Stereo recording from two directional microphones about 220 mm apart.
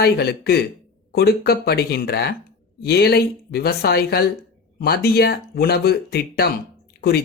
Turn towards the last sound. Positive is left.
turn(degrees=45)  # may be behind; listen again after turning